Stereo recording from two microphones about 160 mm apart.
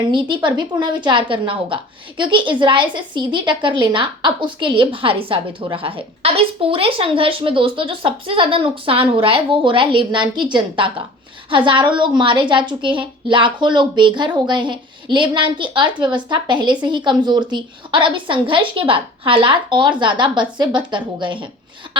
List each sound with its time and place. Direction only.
0.1 s a woman's voice: 30° right (ahead or behind)